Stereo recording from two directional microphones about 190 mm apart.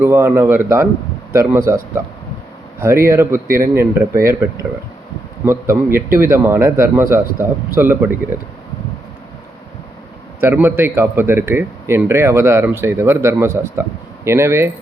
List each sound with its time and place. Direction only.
0.0 s a man's voice: 10° right (ahead or behind)
2.8 s a man's voice: 15° right (ahead or behind)
5.5 s a man's voice: 10° right (ahead or behind)
10.4 s a man's voice: 10° right (ahead or behind)